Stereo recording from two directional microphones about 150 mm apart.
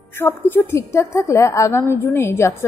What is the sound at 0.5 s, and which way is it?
A woman's voice, 15° left (ahead or behind).